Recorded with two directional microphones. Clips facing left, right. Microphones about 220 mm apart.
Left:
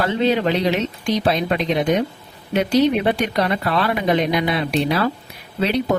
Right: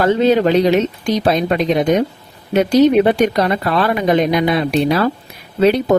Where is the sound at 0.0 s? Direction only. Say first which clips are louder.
Right 6 dB; 45° right (ahead or behind).